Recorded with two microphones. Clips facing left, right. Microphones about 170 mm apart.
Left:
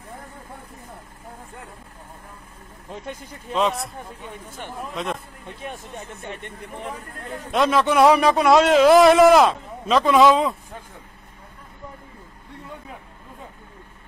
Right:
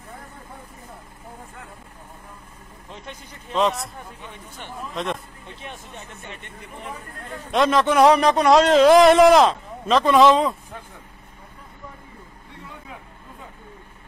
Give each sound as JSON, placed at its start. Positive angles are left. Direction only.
{"t": 4.9, "sound": "a man's voice", "side_deg": 0}
{"t": 5.7, "sound": "speech", "side_deg": 40}
{"t": 7.5, "sound": "a man's voice", "side_deg": 0}